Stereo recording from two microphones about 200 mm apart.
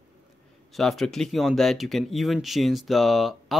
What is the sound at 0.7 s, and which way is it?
Speech, centre (ahead or behind).